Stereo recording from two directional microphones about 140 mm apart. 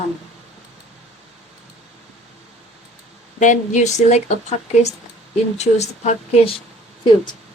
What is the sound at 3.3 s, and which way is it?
A woman's voice, 60° left (ahead or behind).